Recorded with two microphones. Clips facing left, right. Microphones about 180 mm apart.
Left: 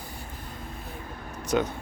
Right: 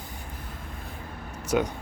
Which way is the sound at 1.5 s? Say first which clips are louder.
Even; 5° right (ahead or behind).